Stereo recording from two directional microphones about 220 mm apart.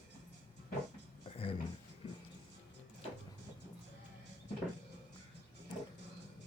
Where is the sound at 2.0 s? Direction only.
25° left (ahead or behind).